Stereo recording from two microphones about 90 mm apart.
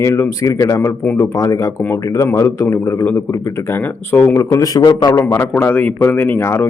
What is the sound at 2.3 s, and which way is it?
A man's voice, 30° left (ahead or behind).